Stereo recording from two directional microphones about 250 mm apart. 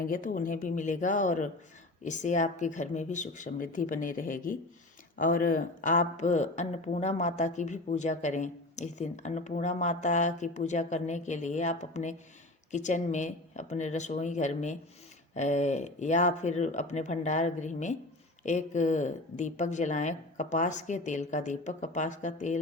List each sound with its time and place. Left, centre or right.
0.0 s a woman's voice: left